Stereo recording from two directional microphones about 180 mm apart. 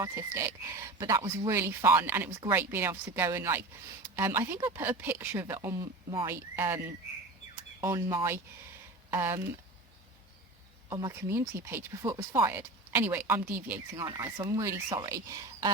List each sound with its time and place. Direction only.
0.0 s speech: 15° right (ahead or behind)
10.8 s speech: 30° right (ahead or behind)
11.1 s speech: 15° right (ahead or behind)